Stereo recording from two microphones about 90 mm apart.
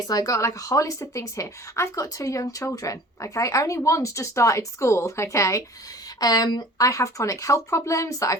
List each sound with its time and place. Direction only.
0.0 s speech: 45° left (ahead or behind)
6.1 s speech: 45° left (ahead or behind)